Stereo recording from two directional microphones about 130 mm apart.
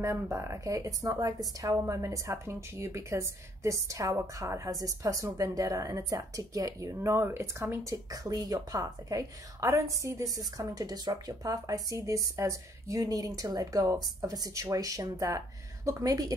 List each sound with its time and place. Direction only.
0.0 s a woman's voice: 20° right (ahead or behind)